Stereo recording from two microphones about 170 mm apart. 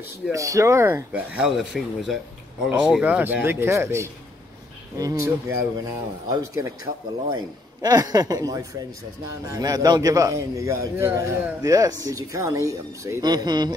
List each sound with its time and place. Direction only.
0.3 s a man's voice: 20° right (ahead or behind)